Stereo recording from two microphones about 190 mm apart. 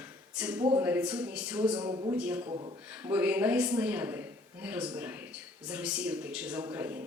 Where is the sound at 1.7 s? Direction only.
25° right (ahead or behind).